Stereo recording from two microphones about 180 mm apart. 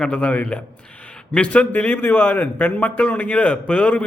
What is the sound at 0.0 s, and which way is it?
A man's voice, 5° left (ahead or behind).